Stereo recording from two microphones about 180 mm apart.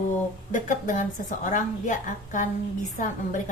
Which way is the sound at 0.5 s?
45° left (ahead or behind).